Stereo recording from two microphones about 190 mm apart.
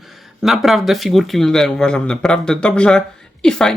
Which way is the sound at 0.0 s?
Centre (ahead or behind).